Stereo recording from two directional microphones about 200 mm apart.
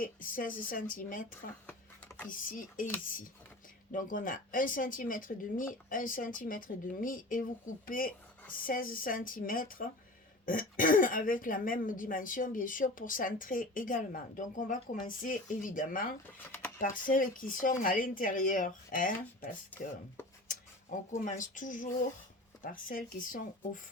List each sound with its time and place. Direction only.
0.0 s speech: 45° left (ahead or behind)
1.6 s a sound: 10° left (ahead or behind)
2.3 s speech: 45° left (ahead or behind)
3.9 s speech: 40° left (ahead or behind)
16.2 s speech: 10° left (ahead or behind)
16.7 s speech: 40° left (ahead or behind)
21.2 s speech: 40° left (ahead or behind)